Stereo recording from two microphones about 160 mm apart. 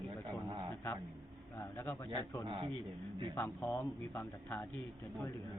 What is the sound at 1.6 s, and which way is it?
Speech, 20° left (ahead or behind).